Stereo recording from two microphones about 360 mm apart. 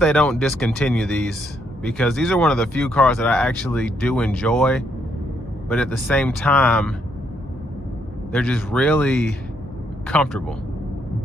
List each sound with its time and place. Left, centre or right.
0.0 s speech: centre
8.3 s speech: centre